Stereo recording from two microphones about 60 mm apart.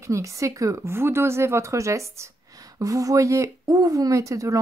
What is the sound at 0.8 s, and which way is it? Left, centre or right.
A woman's voice, right.